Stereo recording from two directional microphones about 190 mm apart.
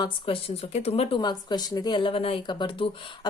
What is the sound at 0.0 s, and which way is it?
A woman's voice, 30° left (ahead or behind).